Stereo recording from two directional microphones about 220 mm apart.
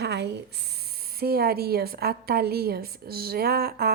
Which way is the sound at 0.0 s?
50° right (ahead or behind).